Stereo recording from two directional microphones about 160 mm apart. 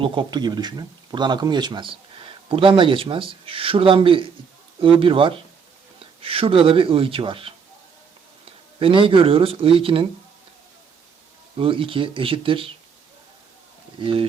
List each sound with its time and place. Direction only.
0.0 s speech: 30° right (ahead or behind)
8.8 s speech: 35° right (ahead or behind)
11.6 s speech: 35° right (ahead or behind)
14.0 s speech: 35° right (ahead or behind)